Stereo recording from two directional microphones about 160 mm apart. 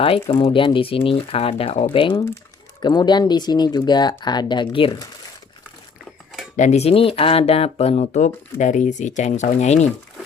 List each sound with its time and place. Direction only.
0.0 s speech: 35° left (ahead or behind)
6.6 s speech: 45° left (ahead or behind)